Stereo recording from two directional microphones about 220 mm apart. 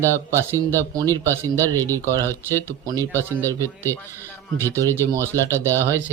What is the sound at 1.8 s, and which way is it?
Speech, 10° left (ahead or behind).